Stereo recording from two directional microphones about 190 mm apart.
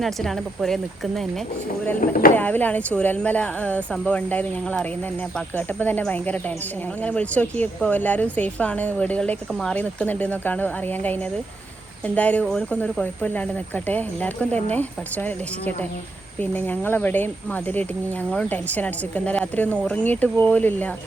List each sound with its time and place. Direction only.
0.0 s speech: centre (ahead or behind)
2.0 s speech: 45° left (ahead or behind)
2.3 s a woman's voice: 10° left (ahead or behind)